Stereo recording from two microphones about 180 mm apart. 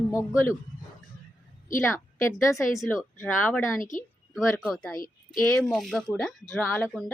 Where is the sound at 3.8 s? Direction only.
45° left (ahead or behind).